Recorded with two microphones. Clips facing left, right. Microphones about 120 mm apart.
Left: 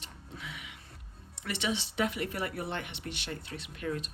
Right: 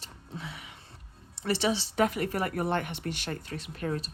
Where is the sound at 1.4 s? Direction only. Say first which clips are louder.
Right 6 dB; 35° right (ahead or behind).